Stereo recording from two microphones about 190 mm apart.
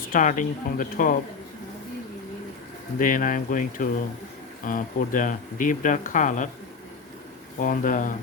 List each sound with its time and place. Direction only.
0.1 s speech: 45° left (ahead or behind)
3.0 s speech: 45° left (ahead or behind)
7.6 s speech: 45° left (ahead or behind)